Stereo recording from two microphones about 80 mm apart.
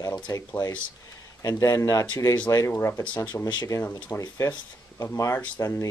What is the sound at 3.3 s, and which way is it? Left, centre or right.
Speech, left.